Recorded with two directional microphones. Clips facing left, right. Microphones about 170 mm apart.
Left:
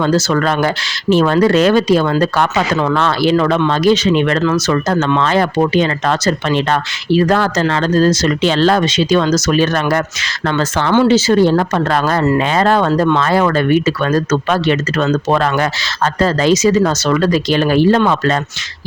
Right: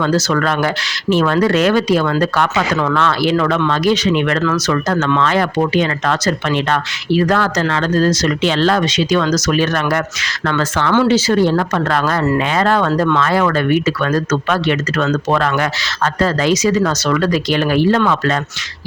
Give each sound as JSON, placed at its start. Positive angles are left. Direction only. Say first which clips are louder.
{"t": 0.0, "sound": "speech", "louder": "left 2 dB", "side_deg": 30}